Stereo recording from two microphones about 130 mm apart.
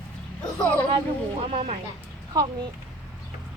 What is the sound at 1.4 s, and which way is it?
Speech, 45° right (ahead or behind).